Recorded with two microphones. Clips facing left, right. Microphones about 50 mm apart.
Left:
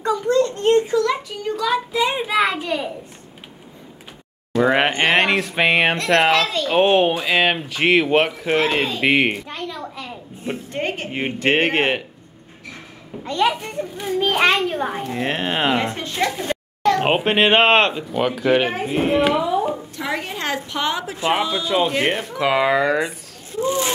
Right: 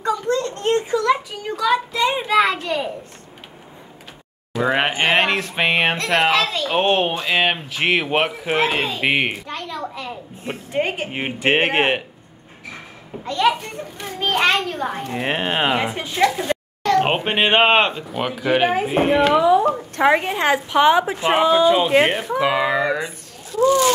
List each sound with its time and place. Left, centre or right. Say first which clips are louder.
0.0 s a sound: left 3 dB; centre
0.8 s child singing: right 1 dB; centre
4.5 s speech: left 2 dB; centre
13.2 s a child's voice: right 1 dB; centre
15.1 s speech: right 2 dB; centre
20.2 s a woman's voice: right 6 dB; right
22.6 s speech: left 2 dB; centre
22.9 s speech: left 4 dB; left